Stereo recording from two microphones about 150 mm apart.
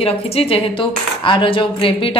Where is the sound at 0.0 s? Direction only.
40° left (ahead or behind).